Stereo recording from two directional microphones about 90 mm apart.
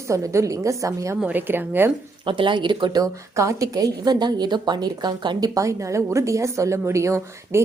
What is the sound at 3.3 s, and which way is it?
A woman's voice, 35° right (ahead or behind).